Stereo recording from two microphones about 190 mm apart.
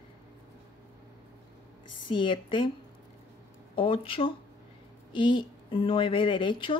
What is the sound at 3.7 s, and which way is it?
Speech, 30° left (ahead or behind).